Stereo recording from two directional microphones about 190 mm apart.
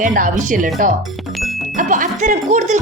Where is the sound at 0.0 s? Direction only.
45° right (ahead or behind).